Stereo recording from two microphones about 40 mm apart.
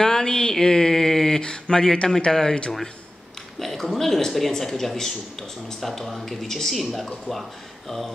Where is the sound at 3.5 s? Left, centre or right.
Centre.